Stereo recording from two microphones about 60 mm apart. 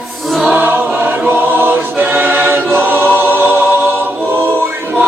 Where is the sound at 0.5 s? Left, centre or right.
Right.